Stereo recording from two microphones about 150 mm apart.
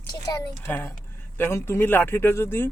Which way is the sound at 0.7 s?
15° left (ahead or behind).